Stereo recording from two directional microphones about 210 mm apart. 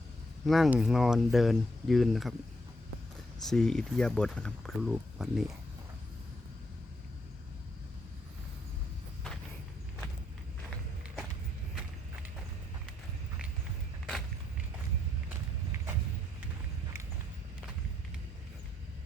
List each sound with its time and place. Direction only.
0.4 s speech: centre (ahead or behind)
3.4 s speech: centre (ahead or behind)